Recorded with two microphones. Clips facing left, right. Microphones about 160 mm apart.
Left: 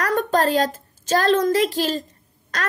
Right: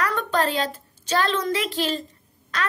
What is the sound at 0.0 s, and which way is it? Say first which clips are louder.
A woman's voice: left 4 dB; 45° left (ahead or behind).